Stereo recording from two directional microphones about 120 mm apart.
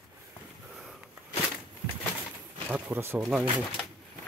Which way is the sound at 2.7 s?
15° right (ahead or behind).